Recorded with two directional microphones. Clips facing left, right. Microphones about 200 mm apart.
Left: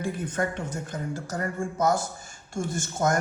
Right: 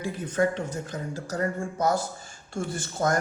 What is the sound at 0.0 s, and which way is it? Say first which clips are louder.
A woman's voice: right 3 dB; 50° left (ahead or behind).